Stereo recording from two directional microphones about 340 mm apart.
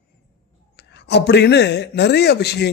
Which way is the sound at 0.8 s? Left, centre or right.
Left.